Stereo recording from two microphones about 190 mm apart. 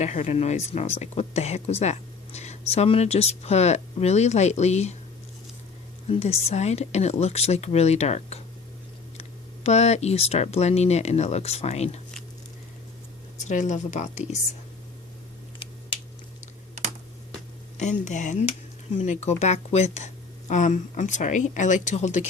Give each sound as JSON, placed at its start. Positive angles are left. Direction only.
{"t": 0.0, "sound": "speech", "side_deg": 35}
{"t": 6.1, "sound": "speech", "side_deg": 35}
{"t": 9.6, "sound": "speech", "side_deg": 35}
{"t": 13.4, "sound": "speech", "side_deg": 40}
{"t": 15.5, "sound": "a sound", "side_deg": 25}
{"t": 18.0, "sound": "speech", "side_deg": 40}